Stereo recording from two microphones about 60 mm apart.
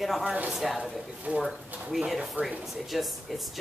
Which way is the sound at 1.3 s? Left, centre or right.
Right.